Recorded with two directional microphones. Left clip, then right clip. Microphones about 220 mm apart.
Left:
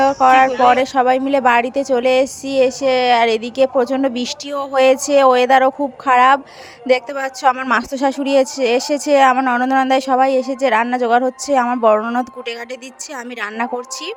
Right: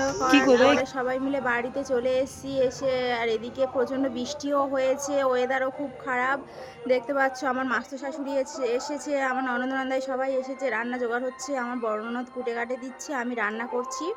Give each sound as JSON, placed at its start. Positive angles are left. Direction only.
{"t": 0.0, "sound": "a woman's voice", "side_deg": 35}